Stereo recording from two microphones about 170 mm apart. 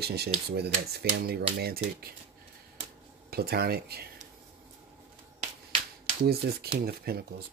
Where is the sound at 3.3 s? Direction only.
65° right (ahead or behind).